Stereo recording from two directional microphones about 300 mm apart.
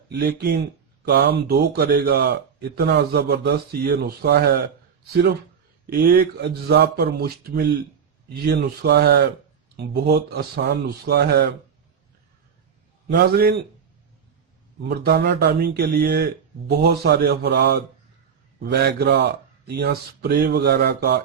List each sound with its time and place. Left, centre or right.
0.1 s speech: right
5.8 s speech: right
13.1 s speech: right
14.8 s speech: right